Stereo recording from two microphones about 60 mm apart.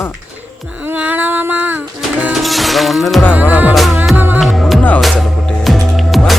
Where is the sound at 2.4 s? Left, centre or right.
Centre.